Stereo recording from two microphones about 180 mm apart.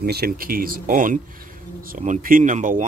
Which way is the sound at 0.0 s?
60° right (ahead or behind).